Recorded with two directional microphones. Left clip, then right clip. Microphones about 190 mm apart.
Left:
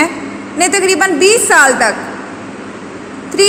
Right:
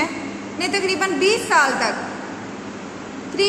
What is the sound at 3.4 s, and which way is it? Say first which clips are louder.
Speech: left 9 dB; 40° left (ahead or behind).